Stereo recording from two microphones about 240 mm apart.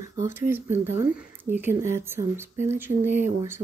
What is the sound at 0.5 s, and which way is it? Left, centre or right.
Speech, centre.